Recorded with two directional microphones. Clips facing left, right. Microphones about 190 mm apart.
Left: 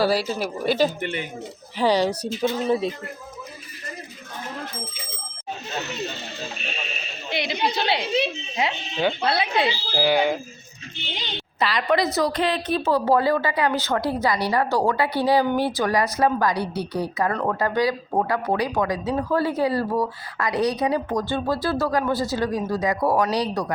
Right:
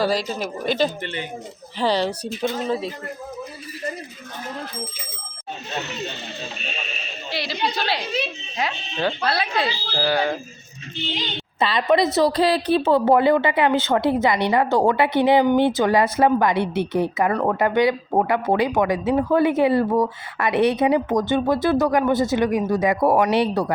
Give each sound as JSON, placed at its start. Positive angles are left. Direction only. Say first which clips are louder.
{"t": 0.0, "sound": "speech", "louder": "left 1 dB", "side_deg": 10}
{"t": 7.3, "sound": "a woman's voice", "louder": "left 1 dB", "side_deg": 20}
{"t": 11.6, "sound": "speech", "louder": "right 3 dB", "side_deg": -25}